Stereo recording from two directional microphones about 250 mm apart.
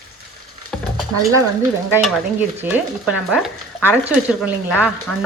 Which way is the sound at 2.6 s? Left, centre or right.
Centre.